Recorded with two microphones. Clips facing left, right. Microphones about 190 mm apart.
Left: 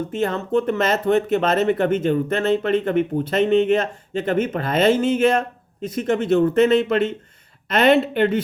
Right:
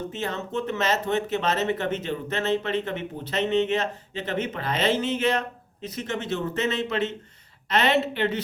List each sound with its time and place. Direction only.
0.1 s speech: 50° left (ahead or behind)